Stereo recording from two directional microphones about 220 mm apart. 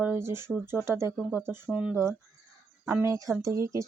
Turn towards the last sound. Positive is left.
turn(degrees=-15)  # may be behind; listen again after turning